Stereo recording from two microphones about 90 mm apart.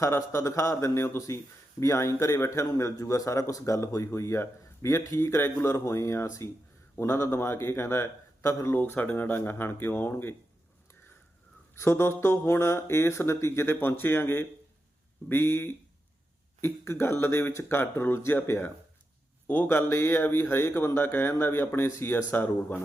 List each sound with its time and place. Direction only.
0.0 s a man's voice: 35° left (ahead or behind)
11.7 s a man's voice: 30° left (ahead or behind)